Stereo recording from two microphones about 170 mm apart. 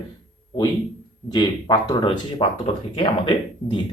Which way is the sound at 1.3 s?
25° left (ahead or behind).